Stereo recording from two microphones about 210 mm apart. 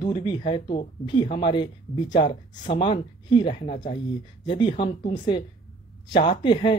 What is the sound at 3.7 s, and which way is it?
Speech, 35° left (ahead or behind).